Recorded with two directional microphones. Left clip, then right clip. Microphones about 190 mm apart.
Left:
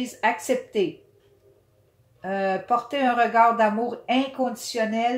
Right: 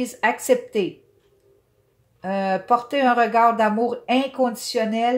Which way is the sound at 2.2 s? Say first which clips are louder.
Right 2 dB; 45° right (ahead or behind).